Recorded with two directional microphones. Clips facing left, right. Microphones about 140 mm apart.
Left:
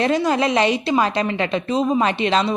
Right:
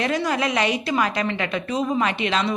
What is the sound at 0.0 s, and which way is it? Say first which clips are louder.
A woman's voice: left 4 dB; 30° left (ahead or behind).